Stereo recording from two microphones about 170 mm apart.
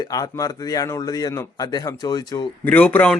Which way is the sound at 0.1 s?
20° left (ahead or behind).